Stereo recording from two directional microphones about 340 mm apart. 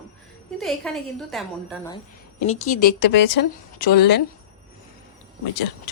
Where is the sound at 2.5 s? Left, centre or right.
Left.